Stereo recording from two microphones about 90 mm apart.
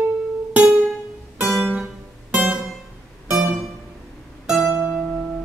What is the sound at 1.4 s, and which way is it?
Music, 5° right (ahead or behind).